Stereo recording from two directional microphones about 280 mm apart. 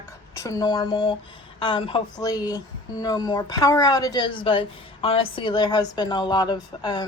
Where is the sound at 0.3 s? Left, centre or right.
Centre.